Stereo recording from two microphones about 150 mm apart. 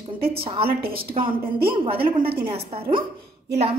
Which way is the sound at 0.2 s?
40° right (ahead or behind).